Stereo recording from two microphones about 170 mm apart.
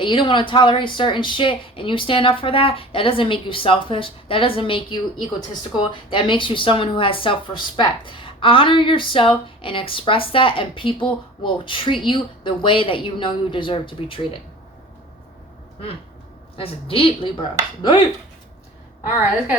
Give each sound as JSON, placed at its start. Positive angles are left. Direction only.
{"t": 0.0, "sound": "a woman's voice", "side_deg": 30}
{"t": 16.6, "sound": "speech", "side_deg": 35}